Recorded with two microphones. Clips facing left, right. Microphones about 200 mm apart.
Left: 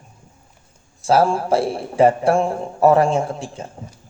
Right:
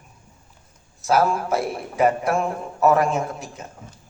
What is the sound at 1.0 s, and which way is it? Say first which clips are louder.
A man's voice: left 3 dB; 30° left (ahead or behind).